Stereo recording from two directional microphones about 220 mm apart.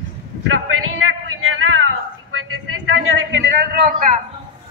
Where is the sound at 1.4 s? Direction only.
70° right (ahead or behind).